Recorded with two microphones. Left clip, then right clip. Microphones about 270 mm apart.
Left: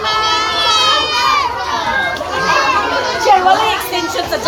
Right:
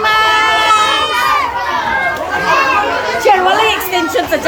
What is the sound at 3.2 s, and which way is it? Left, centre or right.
Chatter, right.